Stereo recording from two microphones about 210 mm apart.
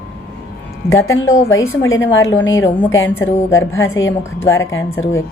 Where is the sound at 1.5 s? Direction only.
70° left (ahead or behind).